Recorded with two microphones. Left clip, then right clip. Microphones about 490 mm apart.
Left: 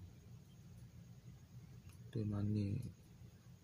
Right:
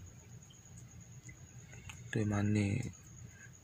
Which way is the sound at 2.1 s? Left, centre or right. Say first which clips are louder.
Right 9 dB; left.